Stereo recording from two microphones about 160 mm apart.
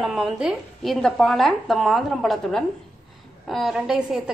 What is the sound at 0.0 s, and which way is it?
A woman's voice, 5° right (ahead or behind).